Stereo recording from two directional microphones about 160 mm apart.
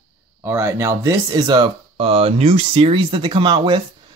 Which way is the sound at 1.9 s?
35° right (ahead or behind).